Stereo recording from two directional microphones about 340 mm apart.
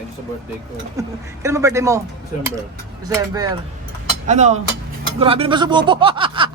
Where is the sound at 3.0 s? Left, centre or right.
Centre.